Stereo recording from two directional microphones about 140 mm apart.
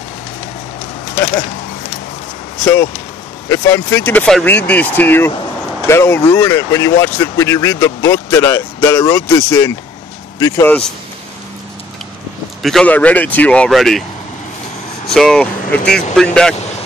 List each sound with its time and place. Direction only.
1.1 s a sound: 20° left (ahead or behind)
2.6 s speech: 15° left (ahead or behind)
12.6 s speech: 5° left (ahead or behind)
15.0 s speech: 5° left (ahead or behind)